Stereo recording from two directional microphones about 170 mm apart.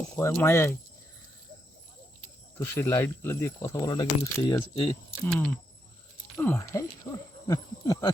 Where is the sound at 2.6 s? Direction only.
15° left (ahead or behind).